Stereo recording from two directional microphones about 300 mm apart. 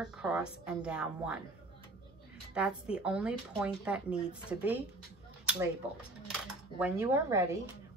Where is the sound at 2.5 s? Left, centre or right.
Centre.